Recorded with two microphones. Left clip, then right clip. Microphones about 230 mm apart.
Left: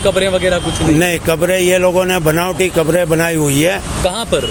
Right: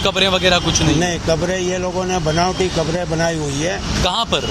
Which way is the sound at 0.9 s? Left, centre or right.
Left.